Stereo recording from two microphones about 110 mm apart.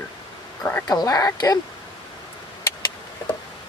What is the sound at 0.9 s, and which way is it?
Speech, 35° left (ahead or behind).